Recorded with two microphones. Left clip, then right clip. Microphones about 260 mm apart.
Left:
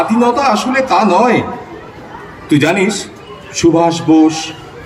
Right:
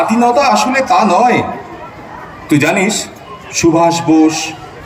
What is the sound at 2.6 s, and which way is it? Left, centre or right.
Speech, right.